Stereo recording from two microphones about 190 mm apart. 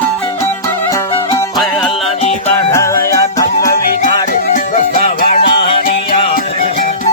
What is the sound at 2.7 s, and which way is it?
Music, 15° left (ahead or behind).